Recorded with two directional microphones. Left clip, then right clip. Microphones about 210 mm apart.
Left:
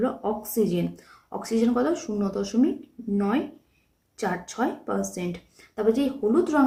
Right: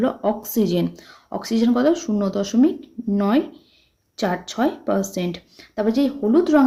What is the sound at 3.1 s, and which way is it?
Speech, 50° right (ahead or behind).